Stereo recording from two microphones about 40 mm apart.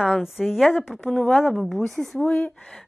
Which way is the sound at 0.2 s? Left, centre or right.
Centre.